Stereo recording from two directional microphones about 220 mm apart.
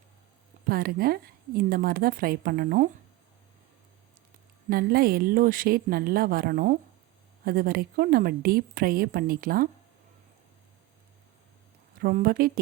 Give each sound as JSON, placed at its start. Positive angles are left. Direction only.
{"t": 0.7, "sound": "speech", "side_deg": -45}
{"t": 4.7, "sound": "speech", "side_deg": -45}
{"t": 11.9, "sound": "speech", "side_deg": -40}